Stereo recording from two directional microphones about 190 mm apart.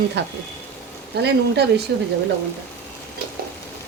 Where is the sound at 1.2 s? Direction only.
60° right (ahead or behind).